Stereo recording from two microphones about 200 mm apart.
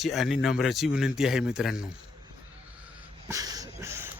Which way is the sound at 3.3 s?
20° right (ahead or behind).